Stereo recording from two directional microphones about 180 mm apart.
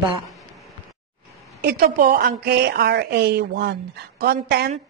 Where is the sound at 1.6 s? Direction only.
60° right (ahead or behind).